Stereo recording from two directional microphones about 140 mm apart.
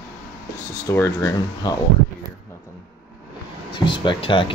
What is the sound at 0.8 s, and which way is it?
Speech, 20° left (ahead or behind).